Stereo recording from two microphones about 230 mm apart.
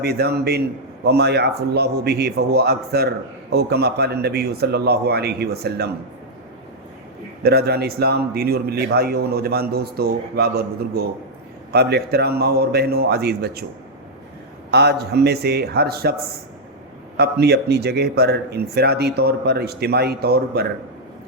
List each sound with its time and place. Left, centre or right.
0.0 s a man's voice: right
7.4 s a man's voice: right
14.7 s a man's voice: right
17.2 s a man's voice: right